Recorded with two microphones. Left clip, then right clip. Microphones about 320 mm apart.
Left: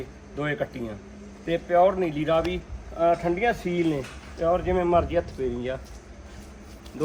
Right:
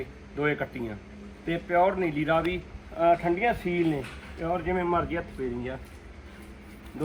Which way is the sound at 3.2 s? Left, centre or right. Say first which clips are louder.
Left 1 dB; left.